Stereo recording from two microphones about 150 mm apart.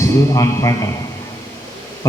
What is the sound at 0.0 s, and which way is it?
Speech, 20° left (ahead or behind).